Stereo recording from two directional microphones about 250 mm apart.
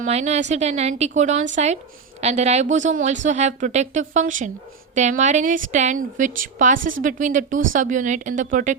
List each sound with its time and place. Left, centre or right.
0.0 s a woman's voice: right